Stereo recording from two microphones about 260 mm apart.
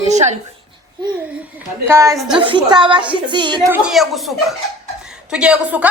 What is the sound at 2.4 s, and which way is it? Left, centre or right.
A woman's voice, centre.